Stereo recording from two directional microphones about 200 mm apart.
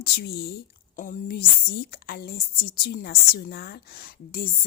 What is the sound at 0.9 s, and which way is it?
A woman's voice, 40° left (ahead or behind).